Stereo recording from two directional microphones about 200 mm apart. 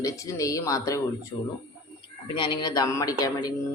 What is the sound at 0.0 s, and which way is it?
Speech, 15° left (ahead or behind).